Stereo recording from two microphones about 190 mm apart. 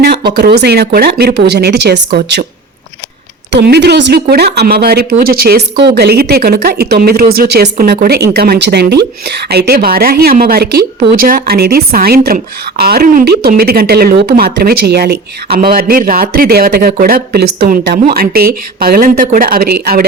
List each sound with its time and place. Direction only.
0.0 s speech: 55° right (ahead or behind)
3.5 s speech: 60° right (ahead or behind)